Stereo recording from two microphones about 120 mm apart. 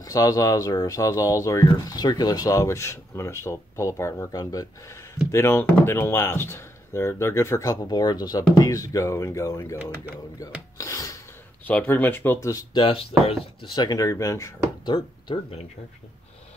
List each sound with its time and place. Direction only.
0.0 s speech: 30° left (ahead or behind)
10.8 s filing: 25° left (ahead or behind)
11.6 s speech: 15° left (ahead or behind)
12.7 s speech: 50° left (ahead or behind)
13.7 s speech: 30° left (ahead or behind)